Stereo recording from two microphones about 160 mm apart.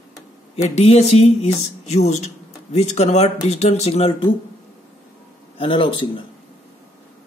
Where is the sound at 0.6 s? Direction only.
45° left (ahead or behind).